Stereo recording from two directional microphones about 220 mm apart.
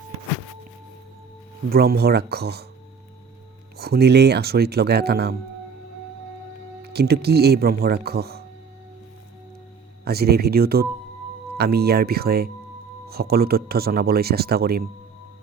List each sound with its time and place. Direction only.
1.7 s speech: 45° right (ahead or behind)
3.8 s speech: 45° right (ahead or behind)
6.8 s speech: 45° right (ahead or behind)
10.0 s speech: 45° right (ahead or behind)